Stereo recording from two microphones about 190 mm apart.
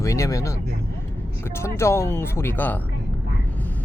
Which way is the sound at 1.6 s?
15° left (ahead or behind).